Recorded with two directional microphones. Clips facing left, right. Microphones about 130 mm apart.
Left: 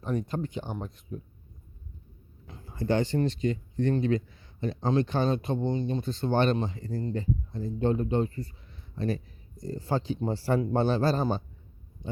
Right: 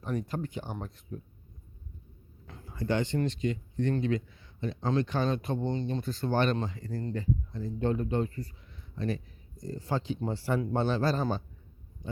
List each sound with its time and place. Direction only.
0.0 s speech: 30° left (ahead or behind)
2.6 s speech: 30° left (ahead or behind)
5.5 s speech: 10° left (ahead or behind)
6.0 s speech: 25° left (ahead or behind)